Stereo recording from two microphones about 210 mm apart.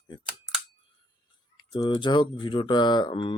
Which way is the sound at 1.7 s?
20° left (ahead or behind).